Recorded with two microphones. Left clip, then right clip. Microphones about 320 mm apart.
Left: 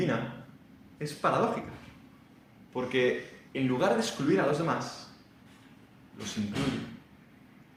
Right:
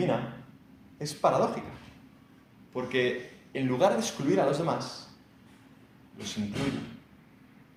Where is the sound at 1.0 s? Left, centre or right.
Centre.